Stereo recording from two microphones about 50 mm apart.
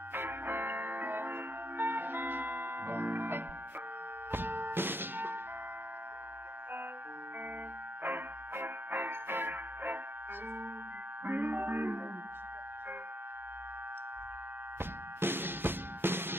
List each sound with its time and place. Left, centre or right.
0.1 s music: right
8.0 s music: right
11.2 s music: right
14.8 s music: right